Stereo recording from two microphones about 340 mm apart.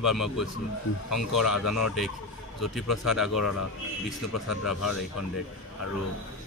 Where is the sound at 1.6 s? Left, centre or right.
Left.